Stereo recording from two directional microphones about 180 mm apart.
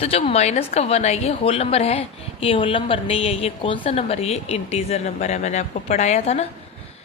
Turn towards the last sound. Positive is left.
turn(degrees=35)  # may be behind; listen again after turning